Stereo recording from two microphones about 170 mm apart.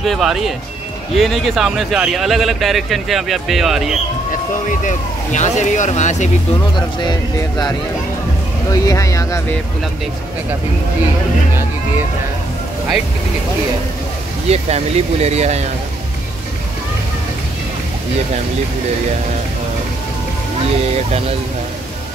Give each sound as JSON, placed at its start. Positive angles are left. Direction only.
{"t": 0.0, "sound": "speech", "side_deg": 0}
{"t": 4.6, "sound": "speech", "side_deg": 45}
{"t": 7.0, "sound": "speech", "side_deg": 25}
{"t": 8.7, "sound": "speech", "side_deg": 20}
{"t": 14.5, "sound": "speech", "side_deg": -40}